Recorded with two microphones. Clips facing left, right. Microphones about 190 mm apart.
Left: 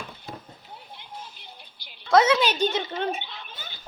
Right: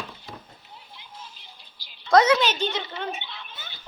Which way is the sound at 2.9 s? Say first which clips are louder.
Left 4 dB; 40° left (ahead or behind).